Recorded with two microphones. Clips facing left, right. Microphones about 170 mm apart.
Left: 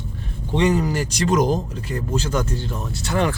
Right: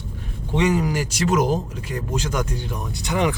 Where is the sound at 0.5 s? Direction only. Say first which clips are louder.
Left 1 dB; 10° right (ahead or behind).